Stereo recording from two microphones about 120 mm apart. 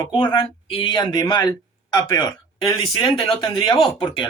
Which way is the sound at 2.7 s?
45° left (ahead or behind).